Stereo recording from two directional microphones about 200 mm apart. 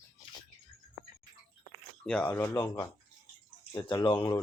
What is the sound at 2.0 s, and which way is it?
A man's voice, 5° left (ahead or behind).